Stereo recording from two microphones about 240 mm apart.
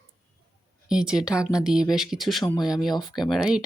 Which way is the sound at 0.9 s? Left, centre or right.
Centre.